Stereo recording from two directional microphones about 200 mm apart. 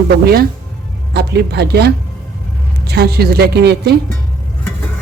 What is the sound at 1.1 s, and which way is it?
A woman's voice, 55° right (ahead or behind).